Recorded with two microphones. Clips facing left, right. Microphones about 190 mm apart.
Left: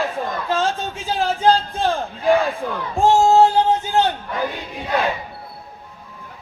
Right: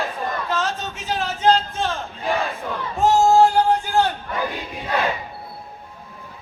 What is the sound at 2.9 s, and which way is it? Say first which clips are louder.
Music: left 1 dB; 25° left (ahead or behind).